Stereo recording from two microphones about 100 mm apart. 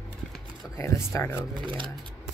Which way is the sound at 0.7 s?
25° left (ahead or behind).